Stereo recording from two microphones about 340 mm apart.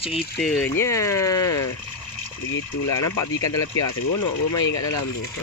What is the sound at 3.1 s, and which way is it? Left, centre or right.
Speech, centre.